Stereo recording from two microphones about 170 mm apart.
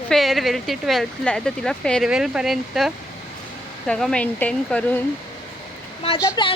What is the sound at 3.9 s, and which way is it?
Speech, 5° left (ahead or behind).